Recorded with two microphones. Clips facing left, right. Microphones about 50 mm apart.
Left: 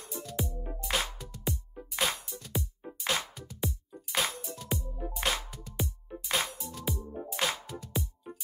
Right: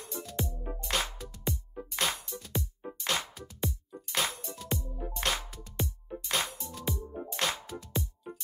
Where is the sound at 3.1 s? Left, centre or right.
Centre.